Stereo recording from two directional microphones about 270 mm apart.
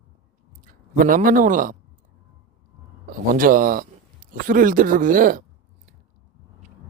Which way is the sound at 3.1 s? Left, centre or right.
Right.